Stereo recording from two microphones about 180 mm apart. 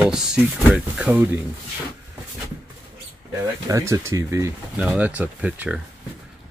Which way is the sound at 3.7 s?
15° right (ahead or behind).